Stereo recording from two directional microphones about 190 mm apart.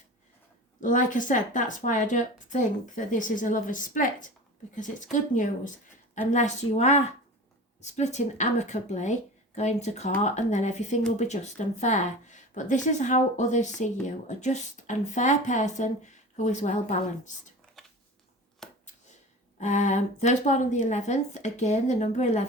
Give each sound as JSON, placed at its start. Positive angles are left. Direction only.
{"t": 0.8, "sound": "speech", "side_deg": 45}
{"t": 17.8, "sound": "a sound", "side_deg": 0}
{"t": 19.5, "sound": "speech", "side_deg": 40}